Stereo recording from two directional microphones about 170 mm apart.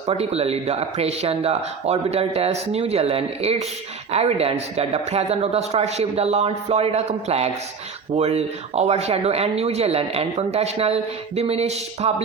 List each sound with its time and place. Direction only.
0.1 s speech: 35° right (ahead or behind)